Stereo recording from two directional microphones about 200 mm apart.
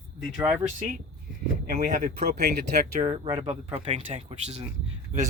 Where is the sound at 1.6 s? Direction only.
45° right (ahead or behind).